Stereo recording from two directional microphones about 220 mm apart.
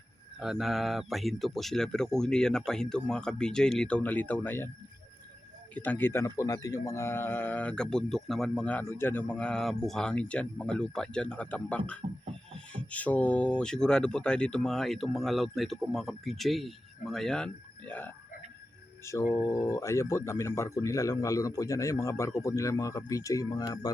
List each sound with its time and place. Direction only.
0.3 s a man's voice: centre (ahead or behind)
5.7 s a man's voice: 5° left (ahead or behind)
12.0 s music: 40° right (ahead or behind)
12.7 s a man's voice: 5° left (ahead or behind)
19.3 s speech: 15° left (ahead or behind)